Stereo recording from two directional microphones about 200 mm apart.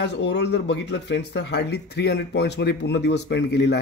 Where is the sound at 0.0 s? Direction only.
60° left (ahead or behind).